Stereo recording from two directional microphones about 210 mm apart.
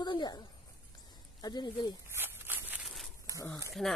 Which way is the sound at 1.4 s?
20° left (ahead or behind).